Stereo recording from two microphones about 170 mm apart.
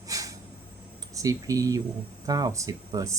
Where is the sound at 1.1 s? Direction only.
20° right (ahead or behind).